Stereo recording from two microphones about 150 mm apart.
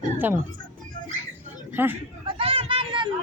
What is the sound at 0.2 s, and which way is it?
Speech, 15° right (ahead or behind).